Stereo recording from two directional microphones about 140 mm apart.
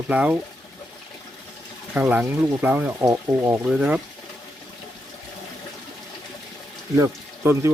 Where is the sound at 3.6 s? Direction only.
10° right (ahead or behind).